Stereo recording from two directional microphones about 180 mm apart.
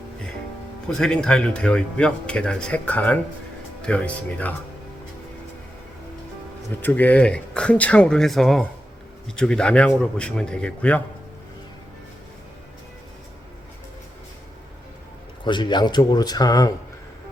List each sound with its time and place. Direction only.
0.9 s speech: 5° left (ahead or behind)
6.8 s speech: 10° left (ahead or behind)
15.4 s speech: 25° left (ahead or behind)